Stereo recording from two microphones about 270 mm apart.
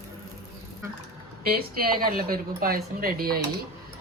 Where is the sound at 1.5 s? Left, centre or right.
Right.